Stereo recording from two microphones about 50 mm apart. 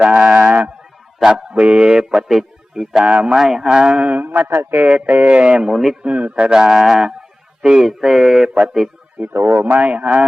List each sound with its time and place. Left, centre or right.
0.0 s a sound: right
1.2 s music: centre
3.0 s a man's voice: right
3.3 s music: centre; by 4.4 s right
4.4 s a man's voice: right
5.0 s a man's voice: right; by 6.0 s centre
6.0 s music: right
7.6 s speech: centre
7.9 s music: centre
8.5 s a man's voice: centre
9.3 s a man's voice: right
9.7 s a man's voice: right